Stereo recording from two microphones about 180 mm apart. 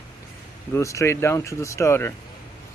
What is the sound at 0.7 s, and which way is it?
Speech, 15° left (ahead or behind).